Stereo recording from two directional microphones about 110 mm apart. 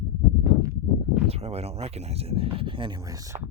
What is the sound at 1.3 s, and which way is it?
Speech, 70° right (ahead or behind).